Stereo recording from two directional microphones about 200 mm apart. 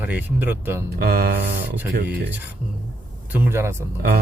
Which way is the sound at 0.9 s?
50° right (ahead or behind).